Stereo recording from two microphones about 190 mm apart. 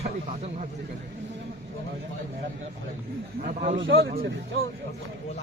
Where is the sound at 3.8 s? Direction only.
80° right.